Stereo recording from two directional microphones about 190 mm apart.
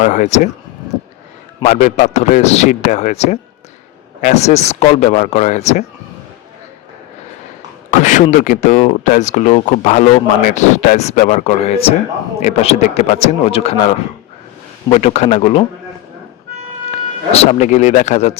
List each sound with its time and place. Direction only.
0.0 s speech: 40° left (ahead or behind)
1.6 s speech: 35° left (ahead or behind)
7.9 s speech: 40° left (ahead or behind)
14.8 s speech: 35° left (ahead or behind)
16.9 s speech: 30° left (ahead or behind)